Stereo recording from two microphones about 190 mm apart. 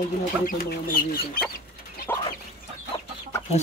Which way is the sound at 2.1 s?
10° left (ahead or behind).